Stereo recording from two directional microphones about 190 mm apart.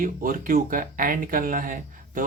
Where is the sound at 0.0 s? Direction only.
45° right (ahead or behind).